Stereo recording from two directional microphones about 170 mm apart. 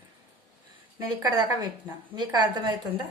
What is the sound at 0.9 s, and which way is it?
A woman's voice, 20° right (ahead or behind).